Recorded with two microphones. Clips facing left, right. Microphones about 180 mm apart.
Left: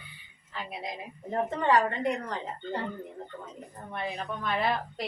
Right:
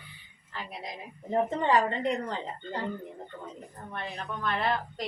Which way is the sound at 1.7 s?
25° right (ahead or behind).